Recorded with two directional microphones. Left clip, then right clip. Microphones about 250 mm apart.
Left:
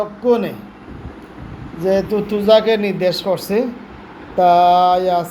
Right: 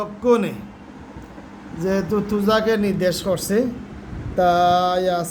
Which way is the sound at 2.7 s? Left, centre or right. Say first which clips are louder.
Left 4 dB; centre.